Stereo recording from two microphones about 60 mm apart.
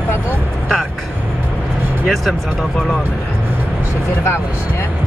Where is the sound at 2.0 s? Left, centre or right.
Centre.